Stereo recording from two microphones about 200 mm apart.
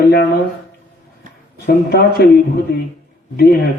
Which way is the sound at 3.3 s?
50° left (ahead or behind).